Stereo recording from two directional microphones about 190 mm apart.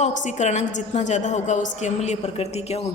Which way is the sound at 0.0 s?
40° left (ahead or behind).